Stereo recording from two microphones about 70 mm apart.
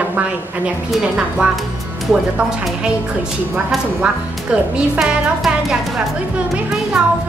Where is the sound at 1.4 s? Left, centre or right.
Centre.